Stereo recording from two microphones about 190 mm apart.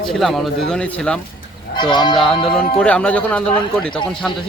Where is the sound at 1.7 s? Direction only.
25° left (ahead or behind).